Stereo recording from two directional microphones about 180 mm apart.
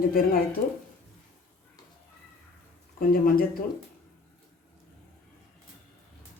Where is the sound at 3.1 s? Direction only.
55° left (ahead or behind).